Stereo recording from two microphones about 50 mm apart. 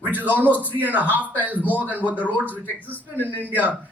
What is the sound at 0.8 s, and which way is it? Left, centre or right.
Speech, right.